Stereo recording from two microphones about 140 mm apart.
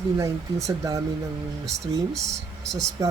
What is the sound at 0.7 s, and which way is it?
Speech, 25° right (ahead or behind).